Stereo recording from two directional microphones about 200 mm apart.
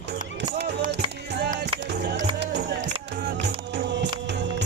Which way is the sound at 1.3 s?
55° right (ahead or behind).